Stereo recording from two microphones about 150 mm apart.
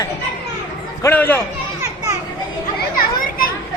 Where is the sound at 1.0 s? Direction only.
10° left (ahead or behind).